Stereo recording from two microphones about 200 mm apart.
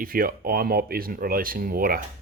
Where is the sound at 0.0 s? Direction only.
45° right (ahead or behind).